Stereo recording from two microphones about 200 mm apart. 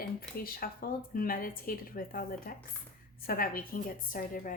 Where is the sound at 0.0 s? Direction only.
50° left (ahead or behind).